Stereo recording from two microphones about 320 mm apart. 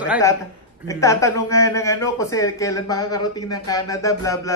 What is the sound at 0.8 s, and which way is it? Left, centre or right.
Speech, centre.